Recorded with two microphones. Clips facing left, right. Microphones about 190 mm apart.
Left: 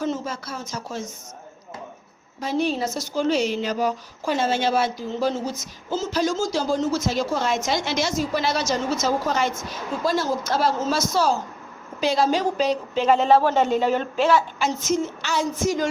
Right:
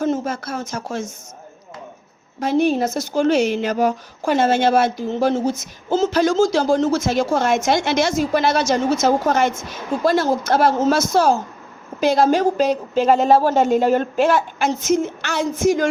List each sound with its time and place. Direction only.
0.0 s speech: 50° right (ahead or behind)
2.4 s a woman's voice: 50° right (ahead or behind)
5.9 s speech: 75° right (ahead or behind)
7.0 s a woman's voice: 50° right (ahead or behind)
10.0 s a woman's voice: 60° right (ahead or behind)